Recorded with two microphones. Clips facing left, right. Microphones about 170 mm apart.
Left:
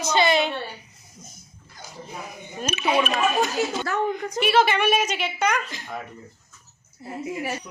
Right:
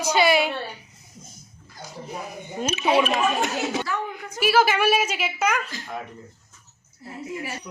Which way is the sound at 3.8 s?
45° left (ahead or behind).